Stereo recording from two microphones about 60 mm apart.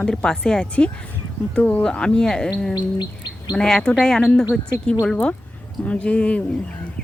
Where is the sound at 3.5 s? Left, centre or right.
Centre.